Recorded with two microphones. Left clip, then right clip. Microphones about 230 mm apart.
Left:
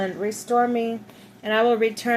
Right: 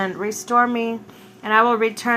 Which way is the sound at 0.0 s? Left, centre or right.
Centre.